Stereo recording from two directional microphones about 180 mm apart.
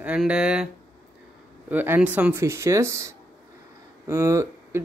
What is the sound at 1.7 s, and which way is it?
Speech, 10° right (ahead or behind).